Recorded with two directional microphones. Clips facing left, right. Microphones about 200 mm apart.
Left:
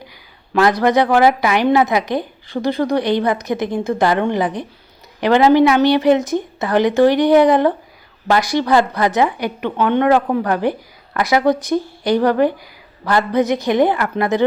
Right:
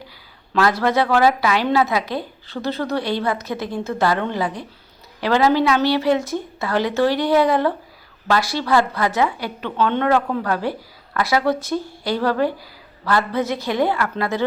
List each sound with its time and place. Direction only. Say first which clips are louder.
0.5 s a woman's voice: left 4 dB; 15° left (ahead or behind)